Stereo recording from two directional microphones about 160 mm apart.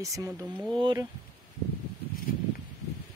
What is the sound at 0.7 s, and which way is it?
Speech, 30° right (ahead or behind).